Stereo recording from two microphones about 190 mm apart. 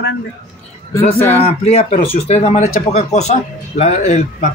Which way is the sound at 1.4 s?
30° left (ahead or behind).